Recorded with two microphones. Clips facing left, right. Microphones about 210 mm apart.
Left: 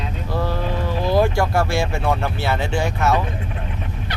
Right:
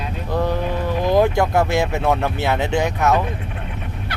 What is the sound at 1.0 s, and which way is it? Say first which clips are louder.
Speech: right 2 dB; 20° right (ahead or behind).